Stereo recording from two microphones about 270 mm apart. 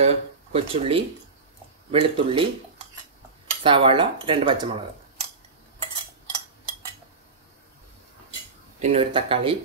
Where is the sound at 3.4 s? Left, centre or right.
Centre.